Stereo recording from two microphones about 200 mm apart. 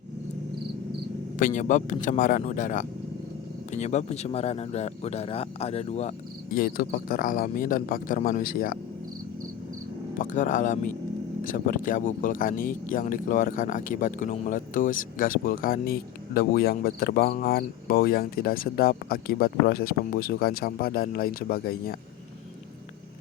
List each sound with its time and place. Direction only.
1.4 s speech: 40° left (ahead or behind)
6.5 s speech: 45° left (ahead or behind)
10.2 s speech: 40° left (ahead or behind)